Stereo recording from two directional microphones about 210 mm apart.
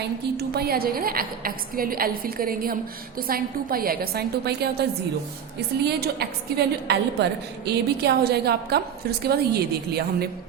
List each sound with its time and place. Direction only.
0.3 s a woman's voice: 50° right (ahead or behind)